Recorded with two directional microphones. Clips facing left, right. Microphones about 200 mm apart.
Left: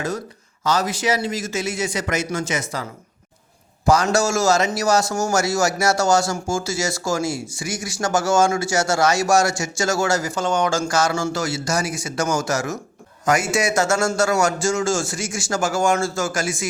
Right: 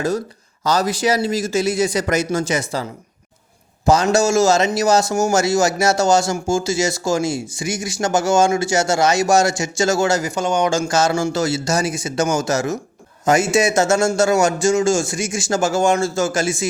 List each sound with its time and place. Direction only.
0.6 s a man's voice: 35° right (ahead or behind)
3.8 s speech: 20° right (ahead or behind)